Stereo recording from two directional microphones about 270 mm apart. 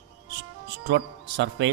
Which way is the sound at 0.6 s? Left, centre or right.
Right.